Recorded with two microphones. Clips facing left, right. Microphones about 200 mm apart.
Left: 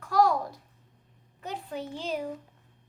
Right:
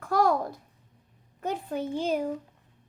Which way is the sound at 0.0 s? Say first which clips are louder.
Even; 50° right (ahead or behind).